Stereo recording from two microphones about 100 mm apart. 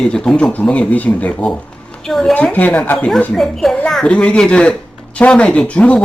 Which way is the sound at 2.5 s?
15° left (ahead or behind).